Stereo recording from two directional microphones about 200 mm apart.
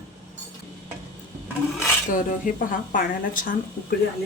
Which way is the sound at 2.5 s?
45° left (ahead or behind).